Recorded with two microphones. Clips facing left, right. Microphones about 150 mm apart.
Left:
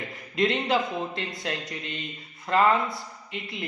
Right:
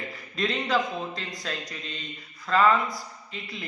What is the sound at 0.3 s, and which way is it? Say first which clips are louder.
Speech: left 2 dB; 25° left (ahead or behind).